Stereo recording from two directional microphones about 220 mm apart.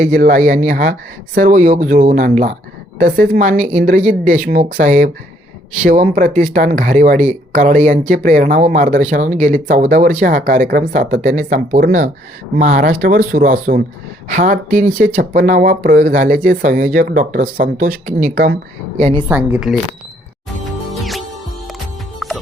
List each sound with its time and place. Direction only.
0.0 s a woman's voice: 35° right (ahead or behind)
19.5 s speech: 5° right (ahead or behind)
20.7 s music: centre (ahead or behind)